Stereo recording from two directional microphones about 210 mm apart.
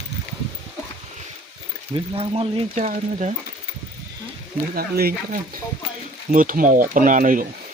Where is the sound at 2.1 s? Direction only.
25° right (ahead or behind).